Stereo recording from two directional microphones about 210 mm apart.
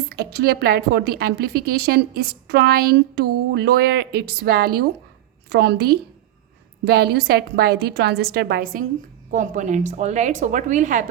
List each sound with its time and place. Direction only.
0.1 s a woman's voice: 50° right (ahead or behind)